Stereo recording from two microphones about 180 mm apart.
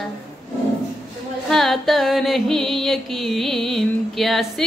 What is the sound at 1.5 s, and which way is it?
Music, centre (ahead or behind).